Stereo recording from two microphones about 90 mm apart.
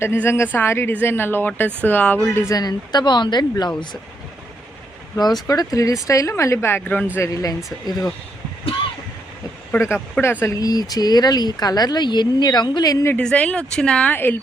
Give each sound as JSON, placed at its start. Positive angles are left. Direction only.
{"t": 0.0, "sound": "speech", "side_deg": 30}
{"t": 2.6, "sound": "speech", "side_deg": 50}
{"t": 5.2, "sound": "a woman's voice", "side_deg": 45}
{"t": 7.2, "sound": "speech", "side_deg": 40}
{"t": 9.7, "sound": "speech", "side_deg": 25}
{"t": 10.4, "sound": "speech", "side_deg": 40}
{"t": 13.1, "sound": "speech", "side_deg": 15}